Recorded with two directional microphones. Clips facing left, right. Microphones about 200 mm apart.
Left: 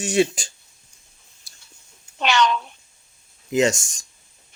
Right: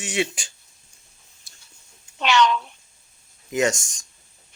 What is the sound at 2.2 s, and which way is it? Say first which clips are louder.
Speech: right 1 dB; 40° left (ahead or behind).